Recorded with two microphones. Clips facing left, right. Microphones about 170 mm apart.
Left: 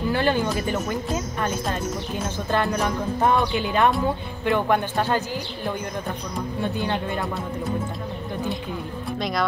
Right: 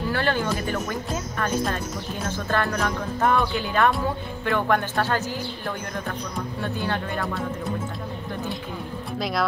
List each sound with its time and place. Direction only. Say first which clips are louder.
0.1 s speech: left 3 dB; 15° left (ahead or behind)
2.2 s speech: left 1 dB; 15° left (ahead or behind)
6.6 s speech: left 2 dB; 15° left (ahead or behind)
9.2 s speech: even; centre (ahead or behind)